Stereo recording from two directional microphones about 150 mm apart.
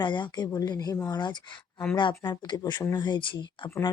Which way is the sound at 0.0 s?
30° left (ahead or behind).